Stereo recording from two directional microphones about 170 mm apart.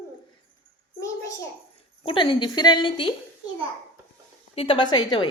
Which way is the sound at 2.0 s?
30° left (ahead or behind).